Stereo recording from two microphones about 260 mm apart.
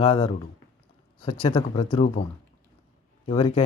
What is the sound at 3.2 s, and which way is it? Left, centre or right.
Speech, left.